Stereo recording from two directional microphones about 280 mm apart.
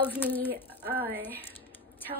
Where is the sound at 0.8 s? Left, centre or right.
Right.